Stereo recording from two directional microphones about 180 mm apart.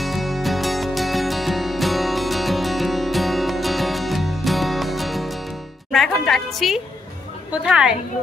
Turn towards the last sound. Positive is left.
turn(degrees=-5)  # may be behind; listen again after turning